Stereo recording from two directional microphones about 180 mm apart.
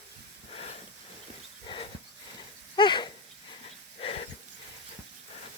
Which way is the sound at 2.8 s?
25° left (ahead or behind).